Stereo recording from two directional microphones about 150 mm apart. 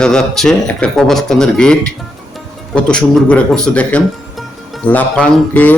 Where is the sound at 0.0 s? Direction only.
5° left (ahead or behind).